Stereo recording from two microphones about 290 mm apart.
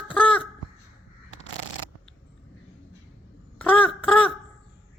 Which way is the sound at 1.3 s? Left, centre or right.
Left.